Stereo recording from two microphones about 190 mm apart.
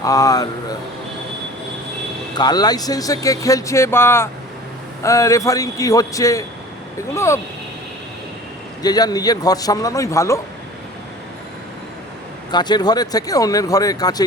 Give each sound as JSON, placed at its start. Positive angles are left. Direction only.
{"t": 0.0, "sound": "speech", "side_deg": 20}
{"t": 2.3, "sound": "speech", "side_deg": 20}
{"t": 8.8, "sound": "speech", "side_deg": 20}
{"t": 12.5, "sound": "speech", "side_deg": 20}